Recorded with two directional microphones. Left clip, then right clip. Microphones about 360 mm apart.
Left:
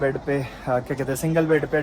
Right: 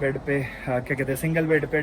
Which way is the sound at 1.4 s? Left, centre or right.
Left.